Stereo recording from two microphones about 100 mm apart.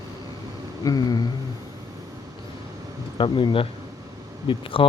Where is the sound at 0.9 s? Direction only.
40° left (ahead or behind).